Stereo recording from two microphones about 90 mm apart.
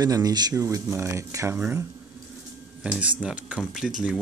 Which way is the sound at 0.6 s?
35° right (ahead or behind).